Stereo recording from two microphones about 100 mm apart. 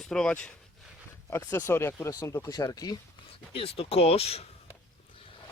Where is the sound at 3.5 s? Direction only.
70° left (ahead or behind); by 4.5 s 90° left.